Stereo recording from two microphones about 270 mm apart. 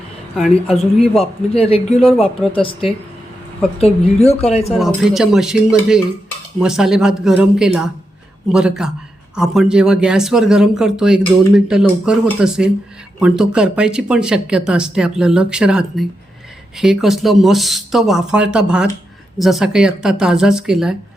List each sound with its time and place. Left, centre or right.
0.3 s speech: centre
1.2 s speech: left
3.8 s speech: left
4.7 s speech: centre